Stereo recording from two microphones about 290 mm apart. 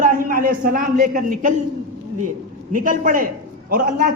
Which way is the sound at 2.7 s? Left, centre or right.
Right.